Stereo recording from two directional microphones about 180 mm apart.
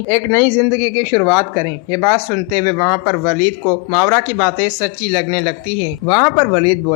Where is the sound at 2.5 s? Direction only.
25° left (ahead or behind).